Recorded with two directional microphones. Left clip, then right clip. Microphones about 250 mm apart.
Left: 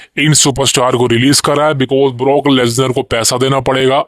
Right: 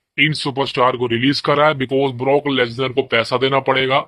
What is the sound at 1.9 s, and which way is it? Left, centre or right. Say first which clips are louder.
Speech: left 5 dB; left.